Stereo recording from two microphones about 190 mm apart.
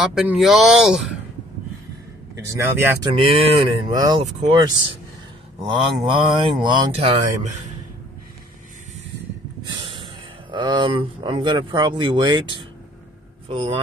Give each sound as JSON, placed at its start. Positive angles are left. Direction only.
{"t": 0.0, "sound": "speech", "side_deg": -5}
{"t": 2.6, "sound": "speech", "side_deg": -10}
{"t": 3.2, "sound": "speech", "side_deg": -25}
{"t": 5.7, "sound": "speech", "side_deg": -25}
{"t": 9.7, "sound": "snort", "side_deg": -25}
{"t": 10.5, "sound": "speech", "side_deg": -25}